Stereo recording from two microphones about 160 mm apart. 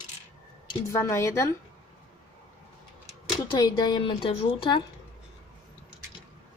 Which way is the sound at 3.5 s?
25° left (ahead or behind).